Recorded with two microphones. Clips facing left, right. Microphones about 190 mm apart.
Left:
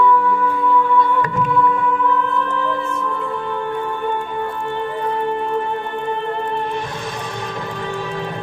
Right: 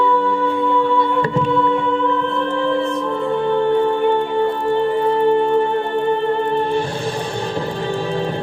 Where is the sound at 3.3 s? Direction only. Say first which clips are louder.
Right 8 dB; 30° right (ahead or behind).